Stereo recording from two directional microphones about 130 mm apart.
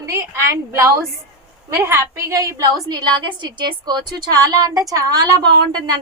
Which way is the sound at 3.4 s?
35° right (ahead or behind).